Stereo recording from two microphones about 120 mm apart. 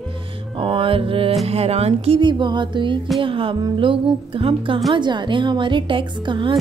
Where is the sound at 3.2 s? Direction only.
45° right (ahead or behind).